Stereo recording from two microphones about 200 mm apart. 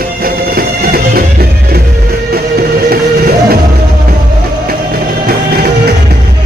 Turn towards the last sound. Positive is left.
turn(degrees=-45)  # may be behind; listen again after turning